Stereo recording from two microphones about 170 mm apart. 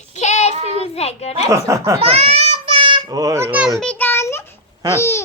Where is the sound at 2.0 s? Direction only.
35° right (ahead or behind).